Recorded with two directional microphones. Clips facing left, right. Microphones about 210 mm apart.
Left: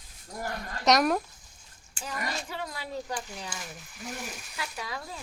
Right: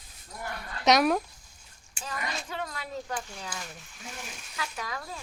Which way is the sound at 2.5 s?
15° left (ahead or behind).